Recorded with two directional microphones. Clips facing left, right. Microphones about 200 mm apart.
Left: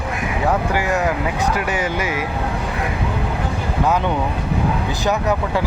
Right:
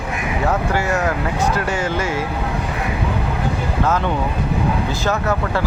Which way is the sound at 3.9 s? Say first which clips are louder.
Left 2 dB; 15° left (ahead or behind).